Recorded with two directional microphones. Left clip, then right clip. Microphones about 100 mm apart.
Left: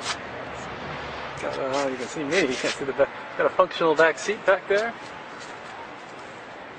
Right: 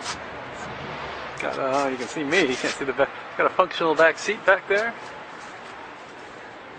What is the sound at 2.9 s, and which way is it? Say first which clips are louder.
Speech: left 1 dB; 30° right (ahead or behind).